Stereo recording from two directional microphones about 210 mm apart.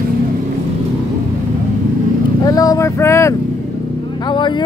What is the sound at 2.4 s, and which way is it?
Vehicle, 15° left (ahead or behind).